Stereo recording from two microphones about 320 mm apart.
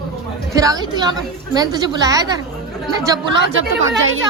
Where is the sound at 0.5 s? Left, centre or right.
Centre.